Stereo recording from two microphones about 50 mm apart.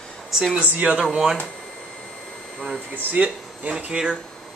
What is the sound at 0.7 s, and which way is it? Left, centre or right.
Speech, right.